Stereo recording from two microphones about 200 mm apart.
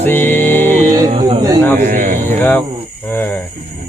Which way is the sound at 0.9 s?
25° right (ahead or behind).